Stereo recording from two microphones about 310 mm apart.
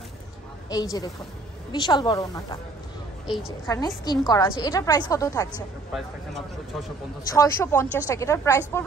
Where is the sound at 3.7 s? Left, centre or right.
Centre.